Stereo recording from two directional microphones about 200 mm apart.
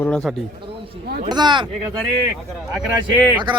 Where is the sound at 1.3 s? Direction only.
20° right (ahead or behind).